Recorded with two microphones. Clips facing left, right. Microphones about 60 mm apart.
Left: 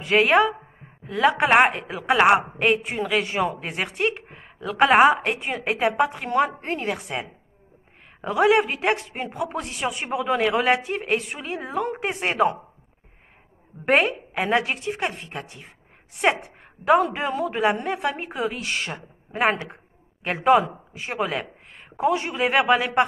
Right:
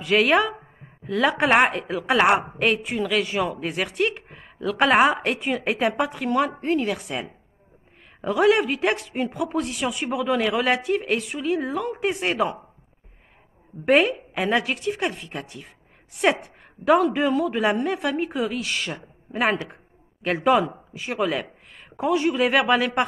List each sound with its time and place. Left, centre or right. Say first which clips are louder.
0.0 s a woman's voice: left 1 dB; left
13.8 s a woman's voice: right 2 dB; left